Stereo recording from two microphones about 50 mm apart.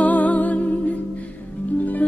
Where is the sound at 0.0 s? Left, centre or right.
Left.